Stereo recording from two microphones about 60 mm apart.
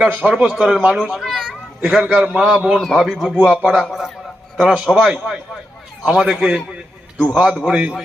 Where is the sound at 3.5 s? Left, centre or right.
Centre.